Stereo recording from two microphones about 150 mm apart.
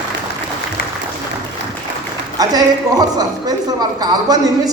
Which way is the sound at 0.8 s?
85° left.